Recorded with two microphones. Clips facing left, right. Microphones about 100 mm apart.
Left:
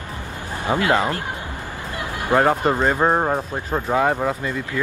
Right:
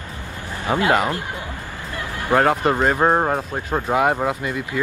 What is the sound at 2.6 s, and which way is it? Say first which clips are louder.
Speech: right 1 dB; 10° right (ahead or behind).